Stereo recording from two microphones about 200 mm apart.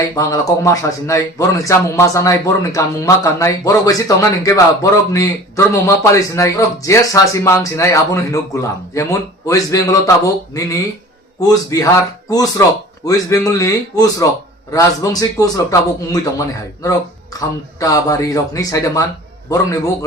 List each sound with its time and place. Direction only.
0.1 s a man's voice: 15° left (ahead or behind)
17.7 s a man's voice: 15° left (ahead or behind)